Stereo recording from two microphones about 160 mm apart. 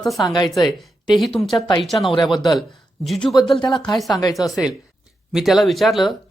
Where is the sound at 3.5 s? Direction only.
30° left (ahead or behind).